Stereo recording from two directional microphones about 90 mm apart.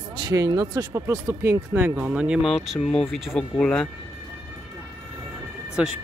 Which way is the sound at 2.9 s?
Centre (ahead or behind).